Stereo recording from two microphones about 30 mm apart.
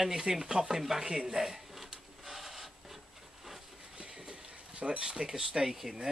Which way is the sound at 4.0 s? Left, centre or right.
Right.